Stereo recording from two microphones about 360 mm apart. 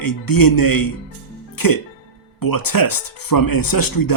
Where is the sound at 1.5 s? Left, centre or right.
Left.